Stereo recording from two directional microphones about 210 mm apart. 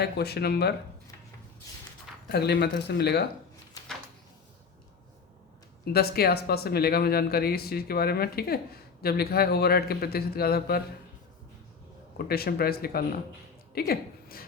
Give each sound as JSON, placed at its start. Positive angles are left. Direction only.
{"t": 0.0, "sound": "speech", "side_deg": 50}
{"t": 2.3, "sound": "speech", "side_deg": 50}
{"t": 5.8, "sound": "speech", "side_deg": 50}
{"t": 12.1, "sound": "a woman's voice", "side_deg": 45}